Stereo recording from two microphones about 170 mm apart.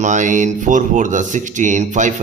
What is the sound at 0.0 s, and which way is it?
Speech, 45° right (ahead or behind).